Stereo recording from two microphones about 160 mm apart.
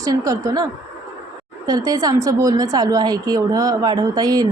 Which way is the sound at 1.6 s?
25° right (ahead or behind).